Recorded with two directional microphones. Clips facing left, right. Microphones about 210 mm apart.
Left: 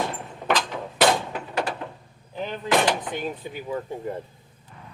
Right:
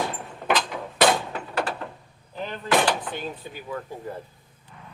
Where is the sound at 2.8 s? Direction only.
15° left (ahead or behind).